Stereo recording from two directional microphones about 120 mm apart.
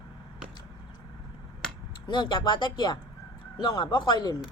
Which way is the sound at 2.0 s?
40° left (ahead or behind).